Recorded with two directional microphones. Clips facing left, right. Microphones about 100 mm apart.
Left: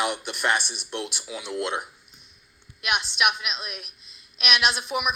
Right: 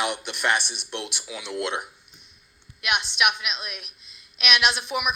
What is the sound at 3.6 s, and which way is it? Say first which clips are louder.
Speech: even; 35° left (ahead or behind).